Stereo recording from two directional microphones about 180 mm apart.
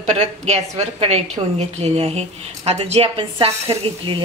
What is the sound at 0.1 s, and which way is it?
A woman's voice, 35° right (ahead or behind).